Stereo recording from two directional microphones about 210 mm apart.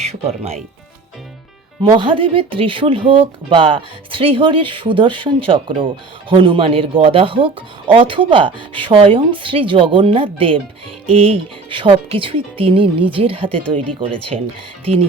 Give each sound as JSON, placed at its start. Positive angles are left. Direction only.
{"t": 0.0, "sound": "speech", "side_deg": -30}
{"t": 1.8, "sound": "speech", "side_deg": -25}